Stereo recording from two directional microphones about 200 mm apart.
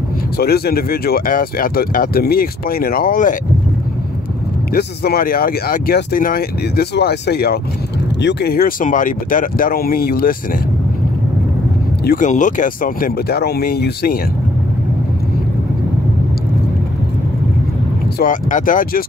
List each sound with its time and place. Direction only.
0.4 s speech: 50° left (ahead or behind)
4.7 s speech: 50° left (ahead or behind)
12.0 s speech: 45° left (ahead or behind)
18.2 s speech: 40° left (ahead or behind)